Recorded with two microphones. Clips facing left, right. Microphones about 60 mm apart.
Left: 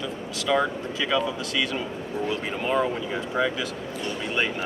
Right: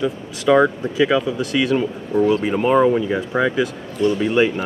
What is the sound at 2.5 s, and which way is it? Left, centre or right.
Speech, right.